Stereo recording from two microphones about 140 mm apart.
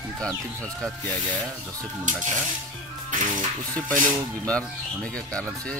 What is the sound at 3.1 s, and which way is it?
Music, 65° right (ahead or behind).